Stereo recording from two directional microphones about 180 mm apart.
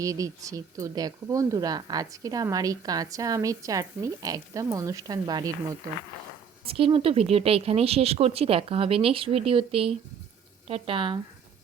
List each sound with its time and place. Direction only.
0.0 s speech: 20° right (ahead or behind)
6.7 s a woman's voice: 30° right (ahead or behind)